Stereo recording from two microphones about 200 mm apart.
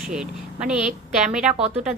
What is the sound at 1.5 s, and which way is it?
Speech, 30° right (ahead or behind).